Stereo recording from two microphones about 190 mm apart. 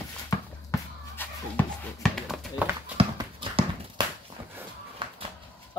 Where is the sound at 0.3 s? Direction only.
15° left (ahead or behind).